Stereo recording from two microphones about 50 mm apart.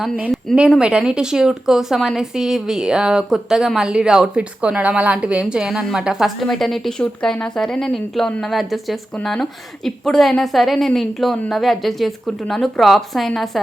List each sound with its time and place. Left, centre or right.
0.8 s speech: centre
4.4 s a woman's voice: right
6.2 s a woman's voice: centre
7.0 s a woman's voice: left; by 13.6 s centre